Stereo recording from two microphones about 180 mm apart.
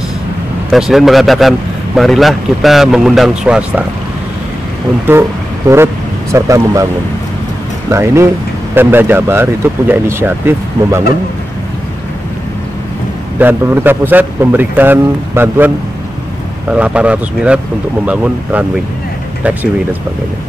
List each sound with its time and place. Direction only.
0.7 s speech: centre (ahead or behind)
6.3 s speech: 15° right (ahead or behind)
7.9 s speech: 15° right (ahead or behind)
13.4 s speech: 10° right (ahead or behind)